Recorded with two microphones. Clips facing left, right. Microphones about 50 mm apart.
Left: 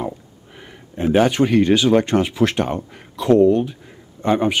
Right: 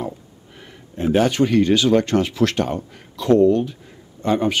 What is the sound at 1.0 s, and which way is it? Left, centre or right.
Speech, centre.